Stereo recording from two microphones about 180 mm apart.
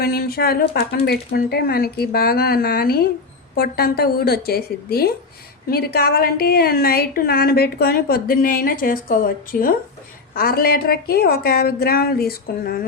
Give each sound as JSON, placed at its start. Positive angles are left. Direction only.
{"t": 0.0, "sound": "a woman's voice", "side_deg": 55}